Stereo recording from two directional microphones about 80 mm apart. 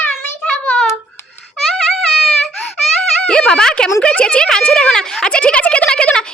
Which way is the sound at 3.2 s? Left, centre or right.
Centre.